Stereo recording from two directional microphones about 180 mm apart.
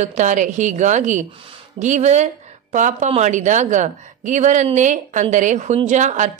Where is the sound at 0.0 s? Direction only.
40° right (ahead or behind).